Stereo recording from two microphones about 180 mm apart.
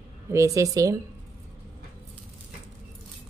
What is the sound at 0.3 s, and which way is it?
Speech, 15° right (ahead or behind).